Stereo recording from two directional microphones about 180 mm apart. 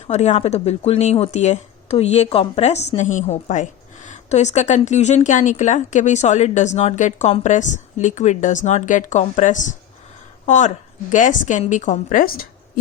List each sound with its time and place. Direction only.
0.1 s a woman's voice: 35° left (ahead or behind); by 12.8 s 55° left (ahead or behind)